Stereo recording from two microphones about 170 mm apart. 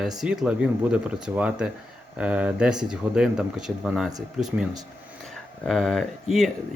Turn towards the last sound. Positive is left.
turn(degrees=0)  # may be behind; listen again after turning